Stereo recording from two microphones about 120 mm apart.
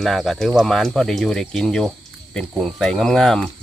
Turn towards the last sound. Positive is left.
turn(degrees=5)  # may be behind; listen again after turning